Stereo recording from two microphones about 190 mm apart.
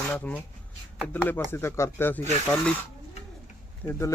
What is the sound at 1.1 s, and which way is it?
Speech, 10° left (ahead or behind).